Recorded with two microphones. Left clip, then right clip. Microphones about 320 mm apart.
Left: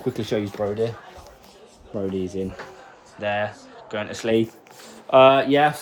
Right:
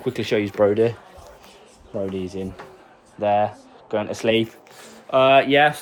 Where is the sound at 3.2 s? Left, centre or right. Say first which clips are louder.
Right 5 dB; centre.